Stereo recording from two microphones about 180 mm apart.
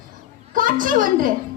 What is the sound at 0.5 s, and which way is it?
Speech, 50° right (ahead or behind).